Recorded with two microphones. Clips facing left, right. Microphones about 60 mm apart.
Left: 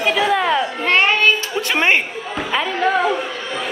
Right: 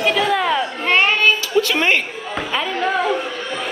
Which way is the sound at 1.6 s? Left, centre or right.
Left.